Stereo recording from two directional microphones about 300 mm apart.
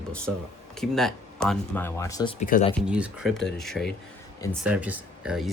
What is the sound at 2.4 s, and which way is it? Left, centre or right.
Speech, left.